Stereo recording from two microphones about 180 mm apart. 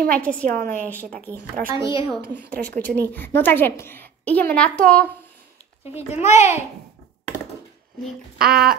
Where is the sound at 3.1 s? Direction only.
10° left (ahead or behind).